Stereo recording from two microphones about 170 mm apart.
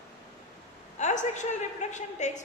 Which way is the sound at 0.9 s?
45° left (ahead or behind).